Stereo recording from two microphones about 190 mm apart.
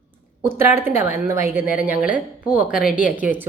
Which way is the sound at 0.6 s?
10° right (ahead or behind).